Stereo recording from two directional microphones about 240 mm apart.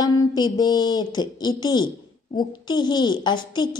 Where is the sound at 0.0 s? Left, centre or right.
Centre.